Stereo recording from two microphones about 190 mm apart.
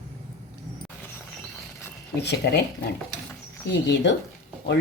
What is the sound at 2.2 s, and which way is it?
Speech, 60° left (ahead or behind).